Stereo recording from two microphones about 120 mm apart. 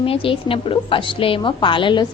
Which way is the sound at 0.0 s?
50° left (ahead or behind).